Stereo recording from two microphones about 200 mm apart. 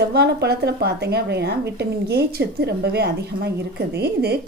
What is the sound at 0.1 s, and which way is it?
A woman's voice, 55° right (ahead or behind).